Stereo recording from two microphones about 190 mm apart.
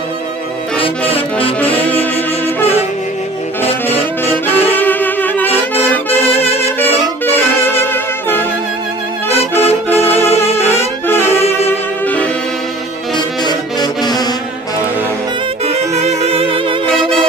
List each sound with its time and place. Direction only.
1.1 s music: 30° left (ahead or behind)
1.8 s music: 10° left (ahead or behind)
3.8 s music: 10° left (ahead or behind)
6.7 s saxophone: 10° left (ahead or behind)
9.6 s saxophone: 10° left (ahead or behind)
11.3 s saxophone: 35° left (ahead or behind)
13.1 s saxophone: 20° left (ahead or behind)
15.6 s music: 35° right (ahead or behind)